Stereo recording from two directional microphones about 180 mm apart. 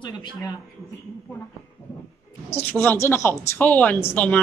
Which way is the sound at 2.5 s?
10° left (ahead or behind).